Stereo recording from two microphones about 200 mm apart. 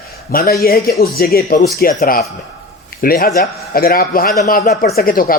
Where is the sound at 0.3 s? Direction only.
50° left (ahead or behind).